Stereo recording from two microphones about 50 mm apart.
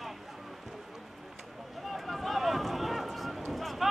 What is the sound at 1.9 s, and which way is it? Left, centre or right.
Run, centre.